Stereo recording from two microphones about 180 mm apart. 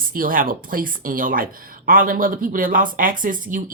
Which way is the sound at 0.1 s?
50° right (ahead or behind).